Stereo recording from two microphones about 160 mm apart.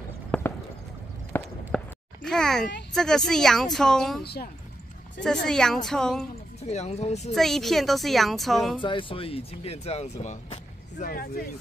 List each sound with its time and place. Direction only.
0.3 s clip-clop: 5° left (ahead or behind)
1.3 s a sound: 15° left (ahead or behind)
2.2 s a woman's voice: 5° left (ahead or behind)
4.2 s speech: 90° left
5.2 s a woman's voice: 5° left (ahead or behind)
6.6 s speech: 45° left (ahead or behind)
7.3 s a woman's voice: centre (ahead or behind)
8.8 s speech: 35° left (ahead or behind); by 11.4 s 65° left (ahead or behind)